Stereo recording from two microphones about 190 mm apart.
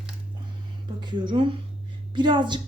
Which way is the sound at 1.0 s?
25° right (ahead or behind).